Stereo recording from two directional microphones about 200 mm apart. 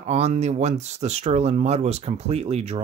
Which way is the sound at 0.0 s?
35° right (ahead or behind).